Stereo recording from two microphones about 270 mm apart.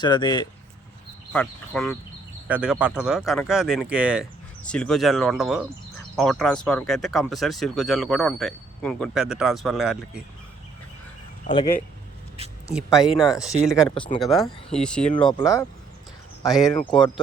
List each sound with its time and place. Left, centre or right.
0.0 s speech: centre
1.3 s speech: centre
11.5 s speech: centre
12.4 s speech: right
13.4 s speech: centre